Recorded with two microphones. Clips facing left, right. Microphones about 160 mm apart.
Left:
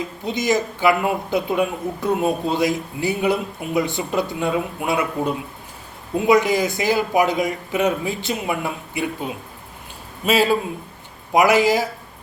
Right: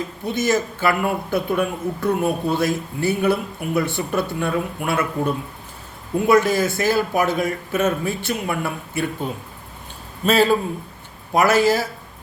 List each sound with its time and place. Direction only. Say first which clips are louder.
0.3 s a man's voice: even; 15° left (ahead or behind)